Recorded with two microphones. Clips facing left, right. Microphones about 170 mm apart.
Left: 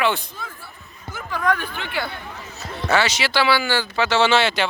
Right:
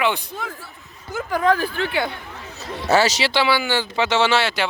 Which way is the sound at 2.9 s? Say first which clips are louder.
Right 3 dB; 40° right (ahead or behind).